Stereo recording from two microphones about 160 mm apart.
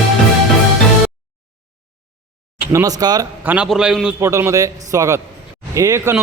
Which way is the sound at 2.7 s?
25° right (ahead or behind).